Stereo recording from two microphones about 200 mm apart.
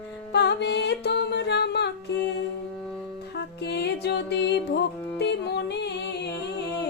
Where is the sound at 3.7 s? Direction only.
55° left (ahead or behind).